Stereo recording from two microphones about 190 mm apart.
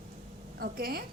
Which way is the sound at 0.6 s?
50° right (ahead or behind).